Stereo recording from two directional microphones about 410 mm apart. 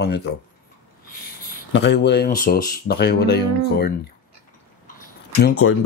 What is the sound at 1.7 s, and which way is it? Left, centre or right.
Speech, left.